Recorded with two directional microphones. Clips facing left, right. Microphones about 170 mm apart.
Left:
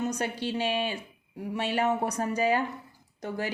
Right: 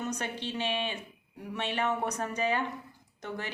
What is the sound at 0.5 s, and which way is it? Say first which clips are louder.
A woman's voice: left 2 dB; 40° left (ahead or behind).